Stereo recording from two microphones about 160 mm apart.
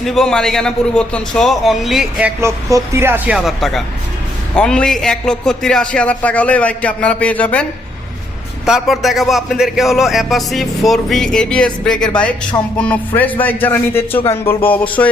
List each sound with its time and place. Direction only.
0.0 s a man's voice: centre (ahead or behind)
2.4 s speech: 20° right (ahead or behind)
3.3 s a man's voice: centre (ahead or behind)
8.6 s a man's voice: centre (ahead or behind)